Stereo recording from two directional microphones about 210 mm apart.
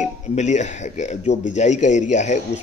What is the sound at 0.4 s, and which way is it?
Speech, 35° left (ahead or behind).